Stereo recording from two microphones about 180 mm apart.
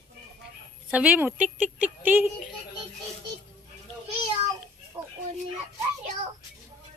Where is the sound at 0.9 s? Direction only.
10° right (ahead or behind).